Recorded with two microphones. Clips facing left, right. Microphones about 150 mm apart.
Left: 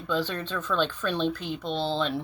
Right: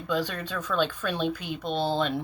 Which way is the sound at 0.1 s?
10° right (ahead or behind).